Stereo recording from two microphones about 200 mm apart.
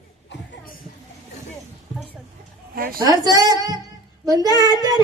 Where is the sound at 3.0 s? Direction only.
20° right (ahead or behind).